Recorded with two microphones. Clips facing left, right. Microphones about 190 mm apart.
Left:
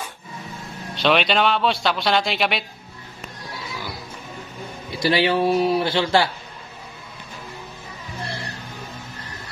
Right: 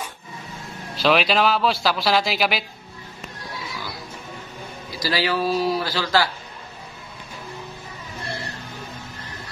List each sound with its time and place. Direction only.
0.9 s a man's voice: centre (ahead or behind)
4.9 s a man's voice: 25° left (ahead or behind)